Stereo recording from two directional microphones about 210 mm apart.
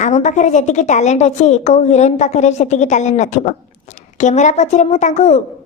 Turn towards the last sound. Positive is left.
turn(degrees=35)  # may be behind; listen again after turning